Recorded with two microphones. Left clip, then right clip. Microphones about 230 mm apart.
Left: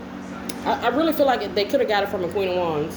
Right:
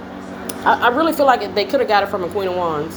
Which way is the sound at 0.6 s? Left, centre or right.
Right.